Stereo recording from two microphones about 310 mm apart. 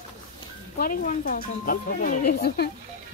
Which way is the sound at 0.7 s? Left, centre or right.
Left.